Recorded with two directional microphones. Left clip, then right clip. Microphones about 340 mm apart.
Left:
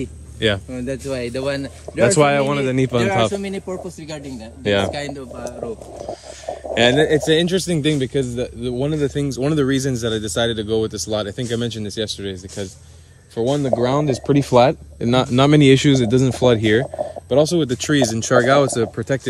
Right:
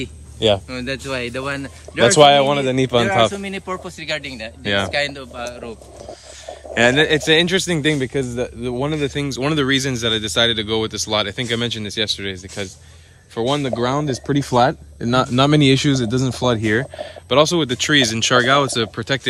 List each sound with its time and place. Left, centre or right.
0.3 s speech: centre
2.0 s a man's voice: right
2.8 s speech: centre
6.1 s a sound: centre
7.2 s speech: centre